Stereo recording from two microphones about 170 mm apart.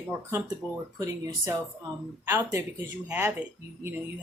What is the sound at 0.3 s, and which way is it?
Speech, 15° right (ahead or behind).